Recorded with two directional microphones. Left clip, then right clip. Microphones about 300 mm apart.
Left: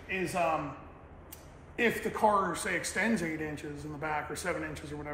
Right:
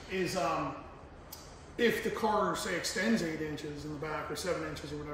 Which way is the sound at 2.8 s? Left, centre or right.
Centre.